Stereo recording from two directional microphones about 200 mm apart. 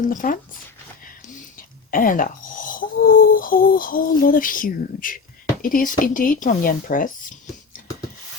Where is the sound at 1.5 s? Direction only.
45° left (ahead or behind).